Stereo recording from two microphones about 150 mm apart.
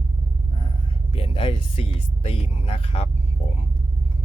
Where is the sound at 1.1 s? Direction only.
40° left (ahead or behind).